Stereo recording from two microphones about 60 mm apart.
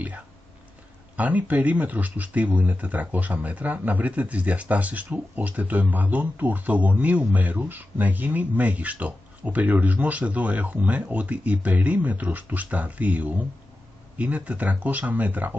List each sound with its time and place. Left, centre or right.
1.1 s speech: right